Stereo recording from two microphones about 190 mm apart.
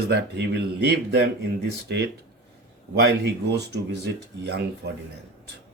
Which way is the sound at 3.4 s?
60° right (ahead or behind).